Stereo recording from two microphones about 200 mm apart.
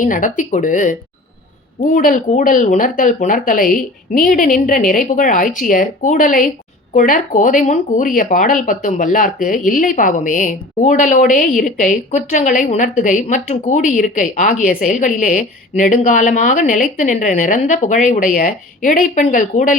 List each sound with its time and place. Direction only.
0.0 s speech: 40° left (ahead or behind)